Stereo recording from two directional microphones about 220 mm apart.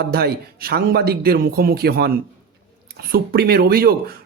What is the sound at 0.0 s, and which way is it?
A man's voice, 45° right (ahead or behind).